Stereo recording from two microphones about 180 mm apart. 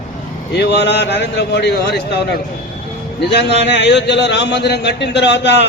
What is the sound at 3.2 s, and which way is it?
A man's voice, 70° left (ahead or behind).